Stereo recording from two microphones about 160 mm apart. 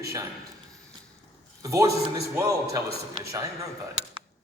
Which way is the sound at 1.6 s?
20° right (ahead or behind).